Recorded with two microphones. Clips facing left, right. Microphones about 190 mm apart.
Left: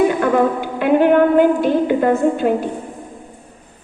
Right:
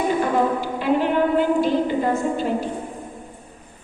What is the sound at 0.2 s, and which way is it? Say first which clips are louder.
A woman's voice: left 4 dB; 60° left (ahead or behind).